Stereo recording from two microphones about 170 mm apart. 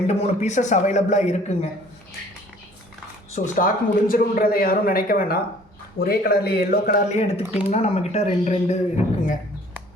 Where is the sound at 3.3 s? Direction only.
50° left (ahead or behind).